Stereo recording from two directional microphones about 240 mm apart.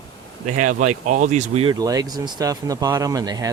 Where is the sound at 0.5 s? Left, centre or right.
Right.